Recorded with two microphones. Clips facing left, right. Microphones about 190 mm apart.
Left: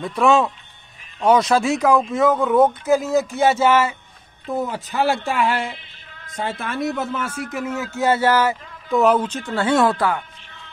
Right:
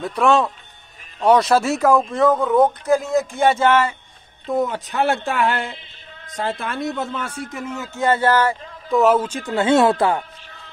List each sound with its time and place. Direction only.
0.0 s speech: centre (ahead or behind)
9.5 s speech: 20° right (ahead or behind)